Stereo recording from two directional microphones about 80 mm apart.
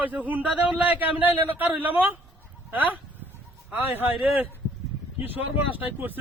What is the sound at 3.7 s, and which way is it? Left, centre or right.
A man's voice, right.